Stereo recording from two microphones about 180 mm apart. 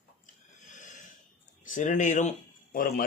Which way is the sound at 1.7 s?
45° left (ahead or behind).